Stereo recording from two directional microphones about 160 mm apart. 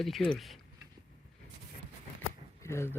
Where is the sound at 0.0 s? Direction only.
5° left (ahead or behind).